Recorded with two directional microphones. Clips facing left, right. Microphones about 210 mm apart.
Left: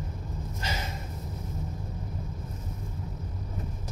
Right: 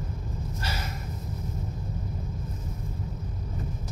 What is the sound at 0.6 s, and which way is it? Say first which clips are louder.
Snort: left 2 dB; 20° left (ahead or behind).